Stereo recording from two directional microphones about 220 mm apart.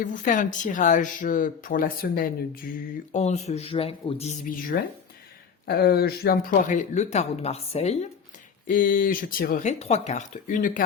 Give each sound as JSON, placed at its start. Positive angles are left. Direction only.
{"t": 0.0, "sound": "speech", "side_deg": 35}
{"t": 3.1, "sound": "speech", "side_deg": 30}
{"t": 5.6, "sound": "speech", "side_deg": 45}